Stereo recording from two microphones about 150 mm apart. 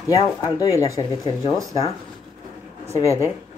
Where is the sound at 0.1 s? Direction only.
20° left (ahead or behind).